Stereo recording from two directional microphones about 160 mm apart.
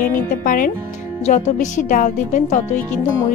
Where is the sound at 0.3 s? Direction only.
60° left (ahead or behind).